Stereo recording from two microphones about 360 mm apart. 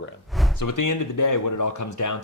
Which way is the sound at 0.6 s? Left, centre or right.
Left.